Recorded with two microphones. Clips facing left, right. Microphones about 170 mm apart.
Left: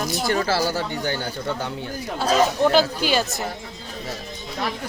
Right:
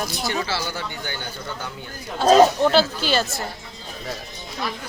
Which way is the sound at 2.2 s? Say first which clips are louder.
Right 4 dB; 10° left (ahead or behind).